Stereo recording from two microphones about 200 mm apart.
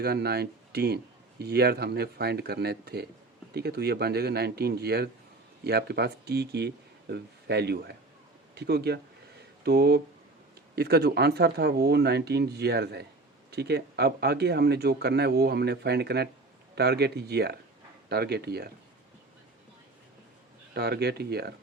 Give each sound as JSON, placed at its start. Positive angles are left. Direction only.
{"t": 0.0, "sound": "speech", "side_deg": -55}
{"t": 20.7, "sound": "speech", "side_deg": -55}